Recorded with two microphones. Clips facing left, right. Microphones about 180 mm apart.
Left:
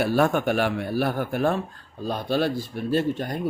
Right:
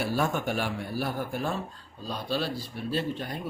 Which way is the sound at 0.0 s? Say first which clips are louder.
Left 7 dB; 60° left (ahead or behind).